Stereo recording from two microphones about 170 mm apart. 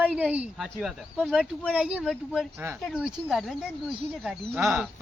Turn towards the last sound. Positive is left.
turn(degrees=-5)  # may be behind; listen again after turning